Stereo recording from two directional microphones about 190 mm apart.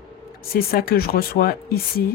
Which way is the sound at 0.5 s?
50° left (ahead or behind).